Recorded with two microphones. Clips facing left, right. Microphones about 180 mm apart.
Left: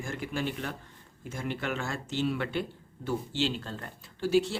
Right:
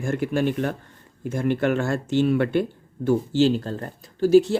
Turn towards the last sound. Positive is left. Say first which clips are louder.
# right 10 dB
turn(degrees=-45)  # may be behind; listen again after turning